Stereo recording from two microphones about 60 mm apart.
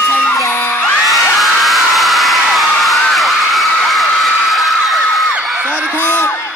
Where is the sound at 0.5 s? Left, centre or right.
Left.